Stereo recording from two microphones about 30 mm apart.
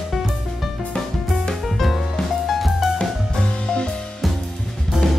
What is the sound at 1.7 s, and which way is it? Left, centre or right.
Music, centre.